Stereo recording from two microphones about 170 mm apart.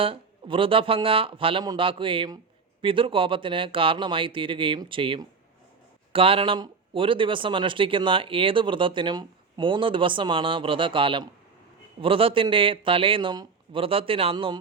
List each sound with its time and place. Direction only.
0.0 s speech: 30° right (ahead or behind)